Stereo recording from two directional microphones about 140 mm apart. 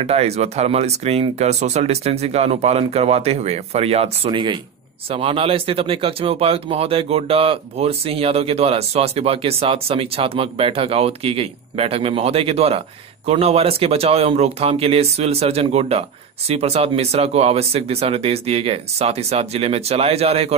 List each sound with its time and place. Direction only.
0.0 s speech: 50° right (ahead or behind)